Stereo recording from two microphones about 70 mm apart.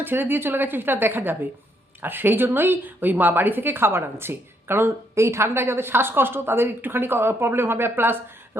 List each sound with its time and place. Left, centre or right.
0.0 s a woman's voice: right